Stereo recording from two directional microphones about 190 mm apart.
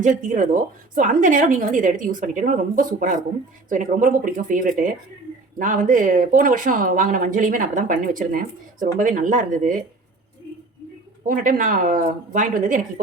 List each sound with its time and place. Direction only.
0.0 s speech: 40° right (ahead or behind)
11.3 s speech: 45° right (ahead or behind)